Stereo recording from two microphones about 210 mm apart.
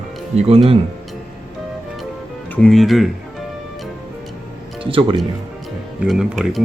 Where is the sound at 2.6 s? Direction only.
Centre (ahead or behind).